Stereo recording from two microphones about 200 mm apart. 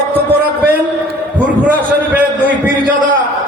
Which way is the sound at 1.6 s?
10° right (ahead or behind).